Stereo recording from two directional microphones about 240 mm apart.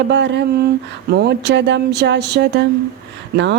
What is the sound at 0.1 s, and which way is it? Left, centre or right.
Speech, right.